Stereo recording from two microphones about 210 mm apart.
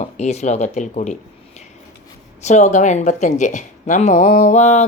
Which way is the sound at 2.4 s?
35° left (ahead or behind).